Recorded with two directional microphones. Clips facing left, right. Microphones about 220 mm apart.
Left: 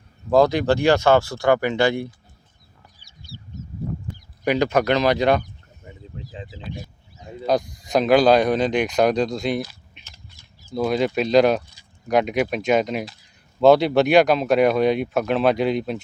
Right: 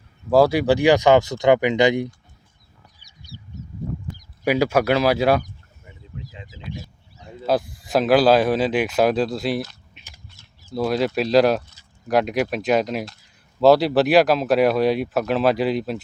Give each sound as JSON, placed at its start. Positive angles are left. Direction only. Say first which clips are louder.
{"t": 0.3, "sound": "speech", "louder": "right 1 dB", "side_deg": -10}
{"t": 3.3, "sound": "crow", "louder": "left 1 dB", "side_deg": -20}
{"t": 4.4, "sound": "speech", "louder": "right 1 dB", "side_deg": -10}
{"t": 5.8, "sound": "a sound", "louder": "left 1 dB", "side_deg": 35}
{"t": 7.4, "sound": "speech", "louder": "even", "side_deg": -5}